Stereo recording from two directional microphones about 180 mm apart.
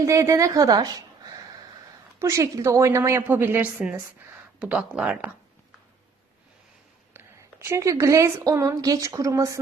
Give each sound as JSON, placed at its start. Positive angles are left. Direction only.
{"t": 0.0, "sound": "a woman's voice", "side_deg": -15}
{"t": 7.6, "sound": "a woman's voice", "side_deg": -15}